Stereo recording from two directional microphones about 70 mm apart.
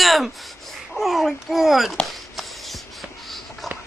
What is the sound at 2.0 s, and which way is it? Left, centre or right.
Writing, centre.